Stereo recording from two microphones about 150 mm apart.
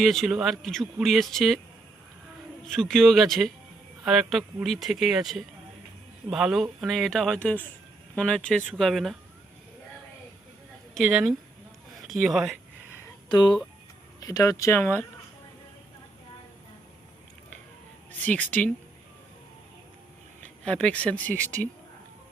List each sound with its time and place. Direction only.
0.0 s speech: centre (ahead or behind)
2.6 s speech: 5° left (ahead or behind)
10.9 s speech: 5° right (ahead or behind)
13.2 s speech: 30° left (ahead or behind)
18.1 s speech: 10° left (ahead or behind)
20.7 s speech: 5° left (ahead or behind)